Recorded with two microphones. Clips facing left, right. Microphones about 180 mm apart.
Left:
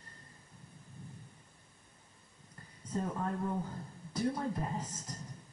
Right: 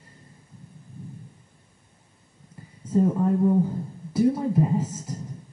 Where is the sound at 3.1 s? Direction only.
20° right (ahead or behind).